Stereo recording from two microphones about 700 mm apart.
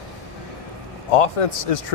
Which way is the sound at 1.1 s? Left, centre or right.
Left.